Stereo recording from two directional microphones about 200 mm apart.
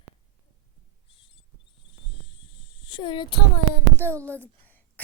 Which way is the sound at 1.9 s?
25° left (ahead or behind).